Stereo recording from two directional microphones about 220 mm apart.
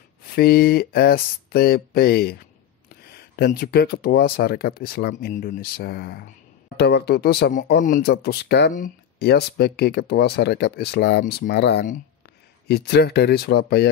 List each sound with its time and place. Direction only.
0.4 s speech: 45° left (ahead or behind)